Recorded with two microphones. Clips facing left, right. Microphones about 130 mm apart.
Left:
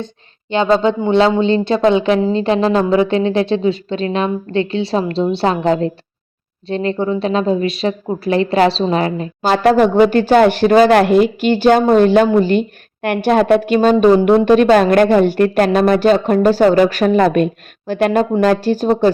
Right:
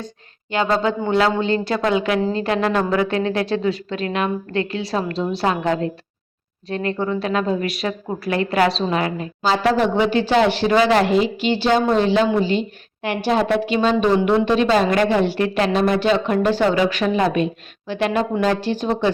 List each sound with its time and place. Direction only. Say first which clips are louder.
0.5 s speech: left 6 dB; 25° left (ahead or behind)
9.4 s speech: left 6 dB; 50° left (ahead or behind)